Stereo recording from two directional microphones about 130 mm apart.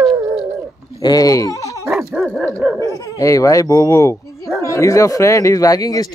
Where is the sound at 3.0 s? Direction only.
25° left (ahead or behind).